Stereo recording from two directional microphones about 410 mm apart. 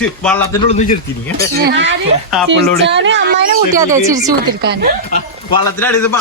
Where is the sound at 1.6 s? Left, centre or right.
Right.